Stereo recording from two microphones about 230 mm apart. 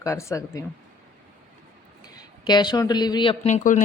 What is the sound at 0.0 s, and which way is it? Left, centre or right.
Speech, centre.